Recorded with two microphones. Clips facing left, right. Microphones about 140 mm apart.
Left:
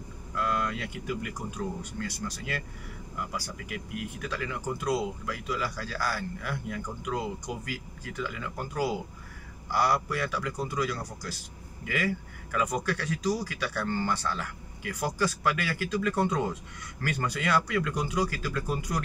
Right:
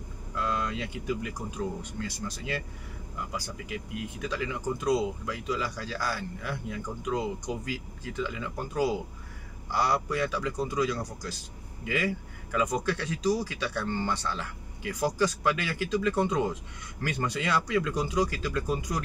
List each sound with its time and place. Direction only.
0.4 s vehicle: 20° right (ahead or behind)
1.8 s speech: 20° right (ahead or behind)